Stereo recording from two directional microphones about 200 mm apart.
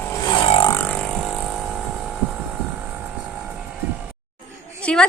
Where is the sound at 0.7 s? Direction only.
5° left (ahead or behind).